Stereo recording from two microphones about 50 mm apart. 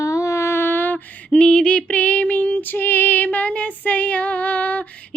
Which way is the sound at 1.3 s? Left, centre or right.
Centre.